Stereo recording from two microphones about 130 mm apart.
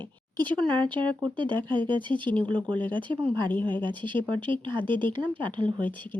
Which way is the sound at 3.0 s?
35° right (ahead or behind).